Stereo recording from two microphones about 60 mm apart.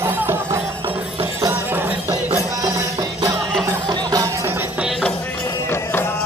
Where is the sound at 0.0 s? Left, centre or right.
Right.